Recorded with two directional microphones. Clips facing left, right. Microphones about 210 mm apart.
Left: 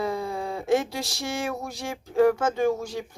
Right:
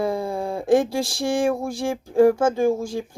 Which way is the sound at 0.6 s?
50° right (ahead or behind).